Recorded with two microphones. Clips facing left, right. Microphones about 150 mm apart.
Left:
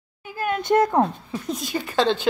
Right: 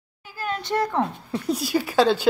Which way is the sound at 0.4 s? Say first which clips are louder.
Left 5 dB; 55° left (ahead or behind).